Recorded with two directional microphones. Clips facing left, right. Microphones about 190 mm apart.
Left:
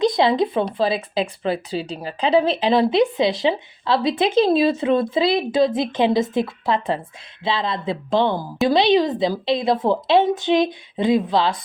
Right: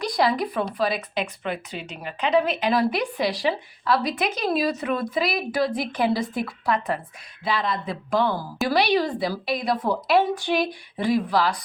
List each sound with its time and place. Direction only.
0.0 s speech: 25° left (ahead or behind)